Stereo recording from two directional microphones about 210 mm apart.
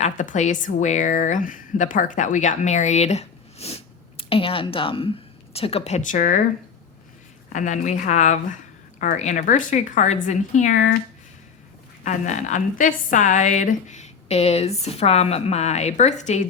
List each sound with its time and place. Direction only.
0.0 s a woman's voice: 35° left (ahead or behind)
7.5 s a woman's voice: 35° left (ahead or behind)
12.0 s a woman's voice: 35° left (ahead or behind)